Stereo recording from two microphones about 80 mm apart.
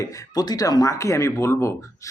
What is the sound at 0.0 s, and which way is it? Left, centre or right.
A man's voice, left.